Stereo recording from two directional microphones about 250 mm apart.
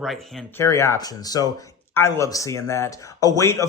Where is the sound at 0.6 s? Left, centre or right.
Centre.